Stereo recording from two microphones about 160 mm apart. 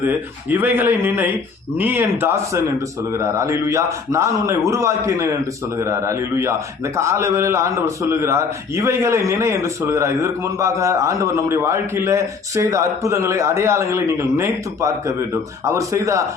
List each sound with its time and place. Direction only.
0.0 s a man's voice: 10° right (ahead or behind)